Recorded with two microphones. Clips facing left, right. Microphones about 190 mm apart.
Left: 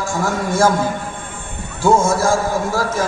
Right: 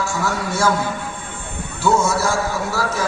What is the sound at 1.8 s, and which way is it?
Speech, 50° left (ahead or behind).